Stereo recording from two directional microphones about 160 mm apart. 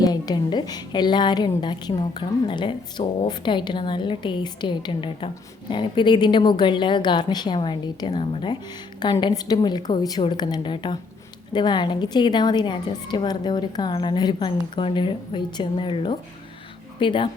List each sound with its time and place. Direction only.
0.0 s a woman's voice: 25° left (ahead or behind)